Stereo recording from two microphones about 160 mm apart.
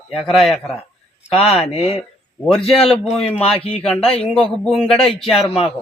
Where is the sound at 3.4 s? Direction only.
40° left (ahead or behind).